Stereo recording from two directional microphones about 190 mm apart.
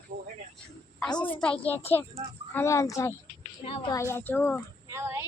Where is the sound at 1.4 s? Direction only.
5° left (ahead or behind).